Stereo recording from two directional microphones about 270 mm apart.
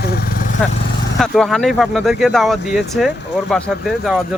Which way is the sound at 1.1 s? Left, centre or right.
Centre.